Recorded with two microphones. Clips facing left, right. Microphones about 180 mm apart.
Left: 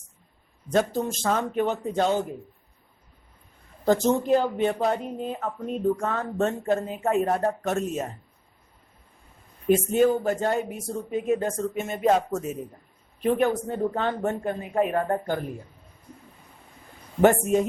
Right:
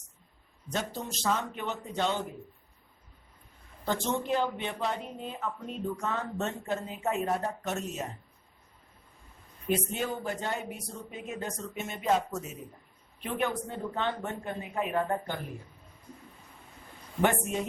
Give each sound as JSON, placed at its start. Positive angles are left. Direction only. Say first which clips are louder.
{"t": 0.7, "sound": "speech", "louder": "left 11 dB", "side_deg": 50}
{"t": 3.8, "sound": "speech", "louder": "left 9 dB", "side_deg": 40}
{"t": 9.6, "sound": "speech", "louder": "left 11 dB", "side_deg": 45}
{"t": 17.2, "sound": "speech", "louder": "left 9 dB", "side_deg": 45}